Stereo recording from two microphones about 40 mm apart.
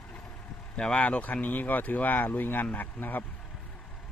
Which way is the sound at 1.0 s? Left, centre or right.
Left.